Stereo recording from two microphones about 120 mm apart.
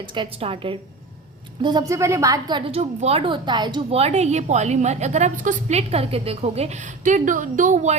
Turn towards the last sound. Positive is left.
turn(degrees=-80)